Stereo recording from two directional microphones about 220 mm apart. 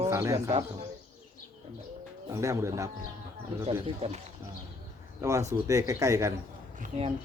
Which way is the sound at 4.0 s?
25° right (ahead or behind).